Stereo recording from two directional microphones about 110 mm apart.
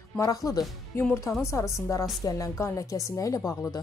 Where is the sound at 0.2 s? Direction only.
30° left (ahead or behind).